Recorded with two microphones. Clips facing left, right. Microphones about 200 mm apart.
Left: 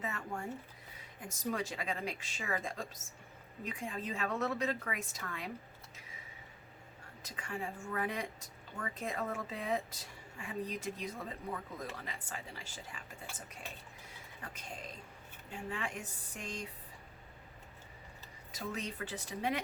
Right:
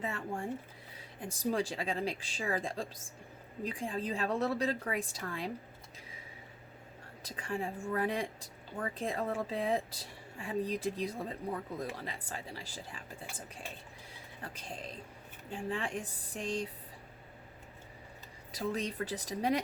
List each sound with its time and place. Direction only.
0.0 s speech: 30° right (ahead or behind)
7.2 s speech: 35° right (ahead or behind)
14.4 s speech: 30° right (ahead or behind)
18.5 s speech: 35° right (ahead or behind)